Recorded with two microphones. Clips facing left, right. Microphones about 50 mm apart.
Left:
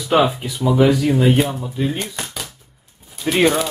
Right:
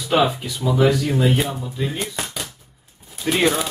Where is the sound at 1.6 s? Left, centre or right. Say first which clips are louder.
Left 4 dB; centre.